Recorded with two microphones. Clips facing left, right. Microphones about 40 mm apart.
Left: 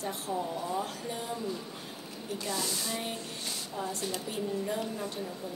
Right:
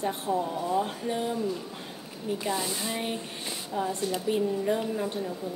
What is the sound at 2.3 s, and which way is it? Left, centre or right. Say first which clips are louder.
A woman's voice: right 3 dB; right.